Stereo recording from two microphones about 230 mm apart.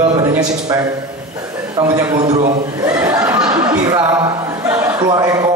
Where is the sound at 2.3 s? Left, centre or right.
Right.